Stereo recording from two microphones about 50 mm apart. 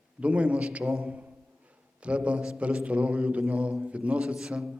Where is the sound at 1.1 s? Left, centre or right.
Right.